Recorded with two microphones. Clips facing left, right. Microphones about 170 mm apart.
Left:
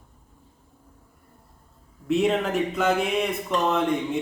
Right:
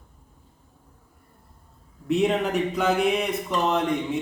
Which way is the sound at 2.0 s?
Centre (ahead or behind).